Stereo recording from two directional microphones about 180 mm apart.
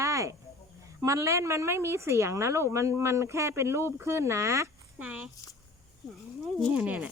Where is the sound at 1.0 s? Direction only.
15° right (ahead or behind).